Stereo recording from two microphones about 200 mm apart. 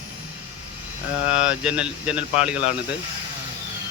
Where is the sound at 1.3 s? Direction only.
5° right (ahead or behind).